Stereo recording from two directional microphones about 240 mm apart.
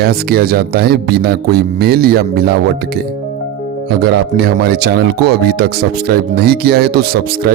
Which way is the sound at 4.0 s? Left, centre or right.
Right.